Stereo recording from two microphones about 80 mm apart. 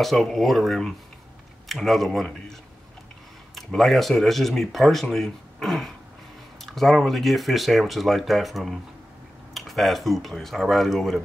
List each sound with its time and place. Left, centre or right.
0.0 s speech: centre
3.5 s speech: centre